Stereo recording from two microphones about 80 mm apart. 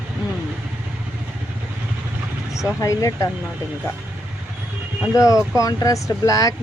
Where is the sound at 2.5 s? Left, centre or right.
Left.